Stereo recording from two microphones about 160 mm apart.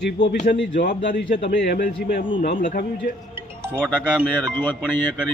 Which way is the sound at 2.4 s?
60° left (ahead or behind).